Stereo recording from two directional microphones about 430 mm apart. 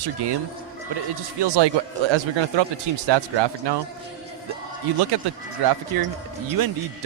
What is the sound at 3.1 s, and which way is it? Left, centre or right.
Speech, right.